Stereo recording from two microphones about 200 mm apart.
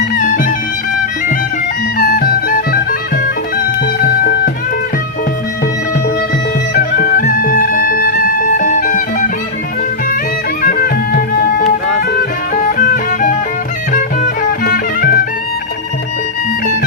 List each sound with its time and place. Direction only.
0.1 s music: 40° left (ahead or behind)
2.0 s music: 45° left (ahead or behind)
4.2 s music: 50° left (ahead or behind)
6.7 s music: 50° left (ahead or behind)
10.6 s music: 50° left (ahead or behind)
14.6 s music: 45° left (ahead or behind)